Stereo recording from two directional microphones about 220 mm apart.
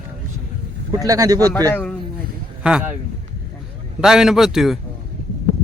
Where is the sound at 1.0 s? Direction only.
15° right (ahead or behind).